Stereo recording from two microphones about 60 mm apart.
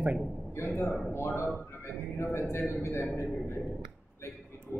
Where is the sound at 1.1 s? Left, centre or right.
Left.